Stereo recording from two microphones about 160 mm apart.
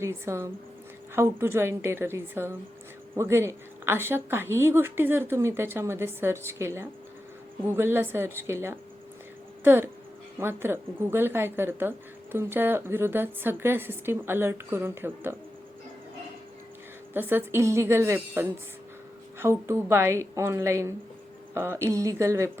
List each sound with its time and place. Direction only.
0.0 s a woman's voice: 15° right (ahead or behind)
17.2 s a woman's voice: 15° right (ahead or behind)